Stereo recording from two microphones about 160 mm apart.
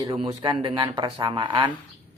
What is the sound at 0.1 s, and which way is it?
Speech, 35° right (ahead or behind).